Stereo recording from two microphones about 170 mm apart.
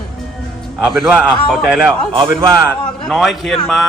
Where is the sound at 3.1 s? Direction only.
Centre (ahead or behind).